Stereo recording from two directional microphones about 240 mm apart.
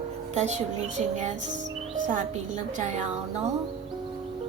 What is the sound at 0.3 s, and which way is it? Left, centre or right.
Speech, right.